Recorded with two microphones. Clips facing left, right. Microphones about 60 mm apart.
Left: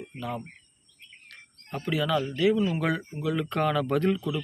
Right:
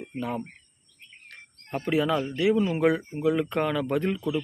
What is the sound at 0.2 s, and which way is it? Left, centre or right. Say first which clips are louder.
Speech: right 4 dB; right.